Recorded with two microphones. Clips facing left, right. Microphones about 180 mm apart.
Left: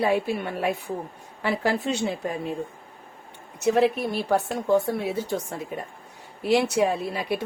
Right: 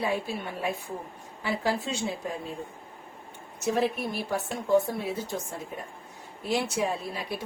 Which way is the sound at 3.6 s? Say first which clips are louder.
Left 6 dB; 65° left (ahead or behind).